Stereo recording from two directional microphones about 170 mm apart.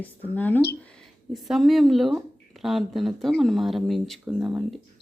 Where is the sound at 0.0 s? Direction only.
10° left (ahead or behind).